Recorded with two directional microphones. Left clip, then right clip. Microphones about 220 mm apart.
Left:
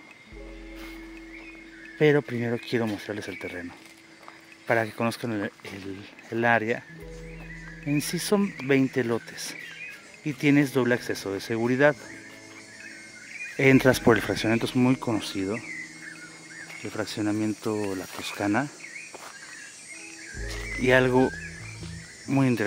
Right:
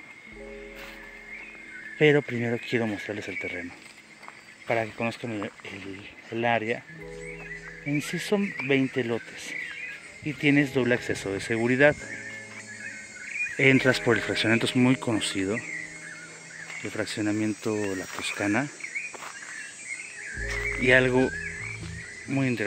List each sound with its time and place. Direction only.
2.0 s speech: 5° left (ahead or behind)
4.6 s speech: 20° left (ahead or behind)
7.9 s speech: 15° left (ahead or behind); by 12.0 s centre (ahead or behind)
13.6 s speech: 10° left (ahead or behind)
14.5 s speech: centre (ahead or behind)
16.8 s speech: 10° left (ahead or behind)
20.8 s speech: 10° left (ahead or behind)
22.3 s speech: 25° left (ahead or behind)